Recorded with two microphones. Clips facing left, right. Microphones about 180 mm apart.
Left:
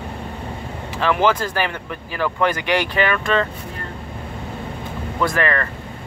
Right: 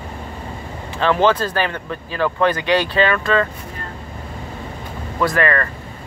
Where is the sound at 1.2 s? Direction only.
15° left (ahead or behind).